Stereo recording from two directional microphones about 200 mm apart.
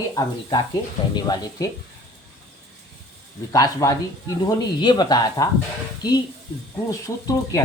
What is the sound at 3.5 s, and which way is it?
Speech, 20° left (ahead or behind).